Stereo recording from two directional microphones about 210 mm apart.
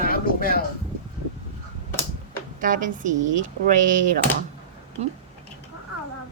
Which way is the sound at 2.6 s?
40° right (ahead or behind).